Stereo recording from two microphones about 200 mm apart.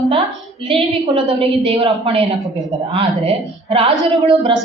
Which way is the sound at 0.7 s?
30° right (ahead or behind).